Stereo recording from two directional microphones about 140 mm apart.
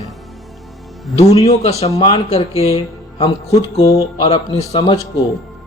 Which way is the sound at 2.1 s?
45° left (ahead or behind).